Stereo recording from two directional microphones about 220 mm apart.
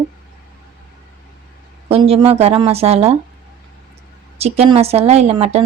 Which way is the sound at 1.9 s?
25° right (ahead or behind).